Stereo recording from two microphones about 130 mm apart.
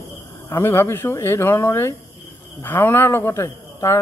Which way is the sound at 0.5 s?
20° left (ahead or behind).